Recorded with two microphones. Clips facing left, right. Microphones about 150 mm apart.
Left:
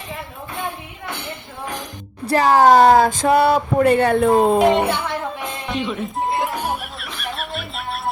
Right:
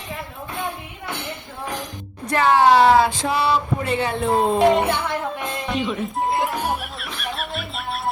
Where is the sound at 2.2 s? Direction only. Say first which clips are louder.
Left 3 dB; 35° left (ahead or behind); by 4.3 s 55° left (ahead or behind).